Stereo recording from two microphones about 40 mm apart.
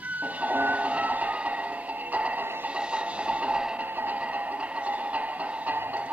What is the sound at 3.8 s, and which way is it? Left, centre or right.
Music, right.